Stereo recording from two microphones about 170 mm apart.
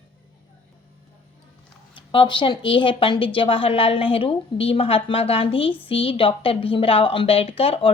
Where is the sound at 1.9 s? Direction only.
30° left (ahead or behind).